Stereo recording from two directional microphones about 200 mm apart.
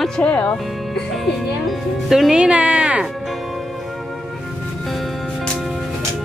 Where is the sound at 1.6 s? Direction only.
Centre (ahead or behind).